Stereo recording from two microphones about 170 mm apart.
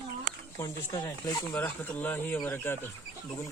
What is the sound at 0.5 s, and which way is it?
Speech, 20° left (ahead or behind).